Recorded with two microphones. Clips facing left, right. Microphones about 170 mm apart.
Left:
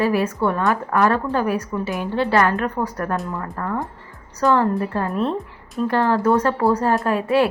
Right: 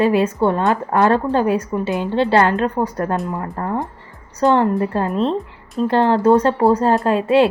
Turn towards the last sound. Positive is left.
turn(degrees=-25)  # may be behind; listen again after turning